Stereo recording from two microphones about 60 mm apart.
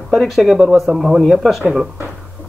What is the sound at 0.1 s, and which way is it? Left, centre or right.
Speech, centre.